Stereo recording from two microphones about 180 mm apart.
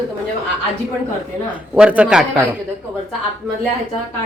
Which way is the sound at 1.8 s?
5° right (ahead or behind).